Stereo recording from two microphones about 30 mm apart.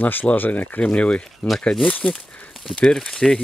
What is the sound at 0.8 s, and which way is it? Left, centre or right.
Speech, left.